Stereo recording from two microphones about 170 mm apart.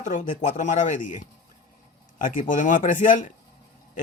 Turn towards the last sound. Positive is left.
turn(degrees=50)  # may be behind; listen again after turning